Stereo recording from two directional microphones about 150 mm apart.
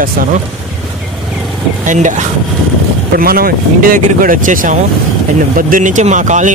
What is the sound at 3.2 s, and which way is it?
Speech, 80° right.